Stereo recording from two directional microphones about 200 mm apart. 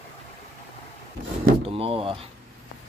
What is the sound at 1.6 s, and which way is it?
Door, 30° right (ahead or behind).